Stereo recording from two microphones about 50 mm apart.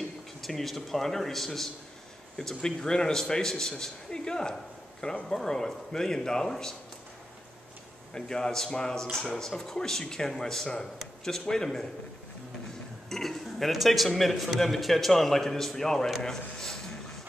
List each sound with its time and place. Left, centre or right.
0.4 s a man's voice: centre
8.1 s a man's voice: centre
13.1 s a man's voice: centre